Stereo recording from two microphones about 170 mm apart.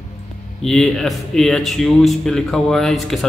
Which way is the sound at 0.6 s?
Centre (ahead or behind).